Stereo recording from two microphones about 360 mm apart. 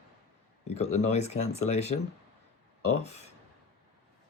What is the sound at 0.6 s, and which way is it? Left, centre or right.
A man's voice, centre.